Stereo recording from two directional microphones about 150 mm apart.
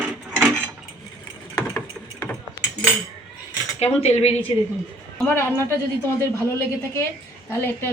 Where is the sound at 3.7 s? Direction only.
45° left (ahead or behind).